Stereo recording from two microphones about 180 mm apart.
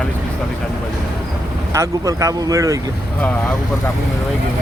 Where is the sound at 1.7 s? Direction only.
15° right (ahead or behind).